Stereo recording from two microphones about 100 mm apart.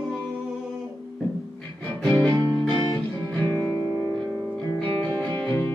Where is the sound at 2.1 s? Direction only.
15° left (ahead or behind).